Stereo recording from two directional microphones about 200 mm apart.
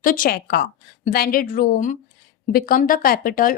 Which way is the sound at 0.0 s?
45° left (ahead or behind).